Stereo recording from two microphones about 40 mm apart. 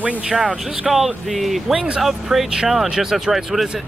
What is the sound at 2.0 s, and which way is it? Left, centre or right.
Speech, centre.